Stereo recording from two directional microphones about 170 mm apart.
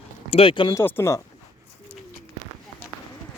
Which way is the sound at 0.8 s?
15° left (ahead or behind).